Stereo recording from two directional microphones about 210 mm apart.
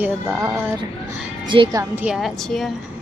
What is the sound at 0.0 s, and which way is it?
A woman's voice, 10° right (ahead or behind).